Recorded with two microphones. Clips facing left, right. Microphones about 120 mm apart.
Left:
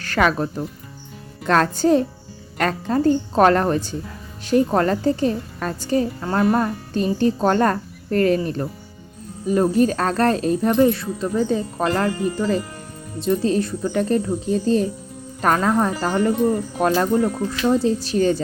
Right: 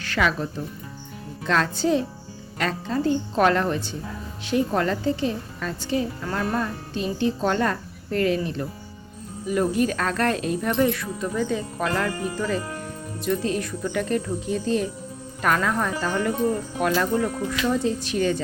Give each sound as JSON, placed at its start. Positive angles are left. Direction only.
{"t": 0.0, "sound": "speech", "side_deg": 45}
{"t": 1.5, "sound": "a woman's voice", "side_deg": 50}
{"t": 9.5, "sound": "speech", "side_deg": 35}